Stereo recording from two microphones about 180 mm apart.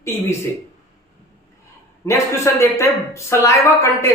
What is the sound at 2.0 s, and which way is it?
Speech, 15° left (ahead or behind).